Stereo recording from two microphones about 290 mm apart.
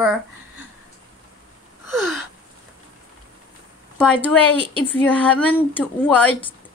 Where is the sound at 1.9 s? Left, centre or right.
Centre.